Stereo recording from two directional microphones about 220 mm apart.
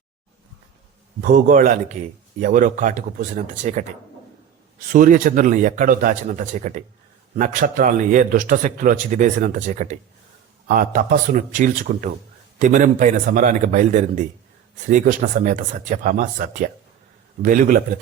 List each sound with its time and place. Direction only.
1.2 s a man's voice: 35° right (ahead or behind)
4.9 s a man's voice: 40° right (ahead or behind)